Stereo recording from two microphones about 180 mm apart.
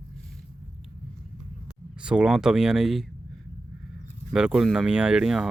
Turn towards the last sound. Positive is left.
turn(degrees=-5)  # may be behind; listen again after turning